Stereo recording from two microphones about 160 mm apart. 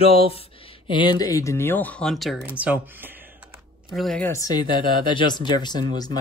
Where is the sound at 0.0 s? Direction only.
35° left (ahead or behind); by 2.4 s centre (ahead or behind).